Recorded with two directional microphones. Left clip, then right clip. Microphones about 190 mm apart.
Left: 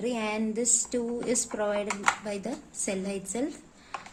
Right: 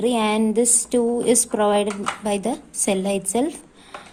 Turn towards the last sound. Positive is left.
turn(degrees=-25)  # may be behind; listen again after turning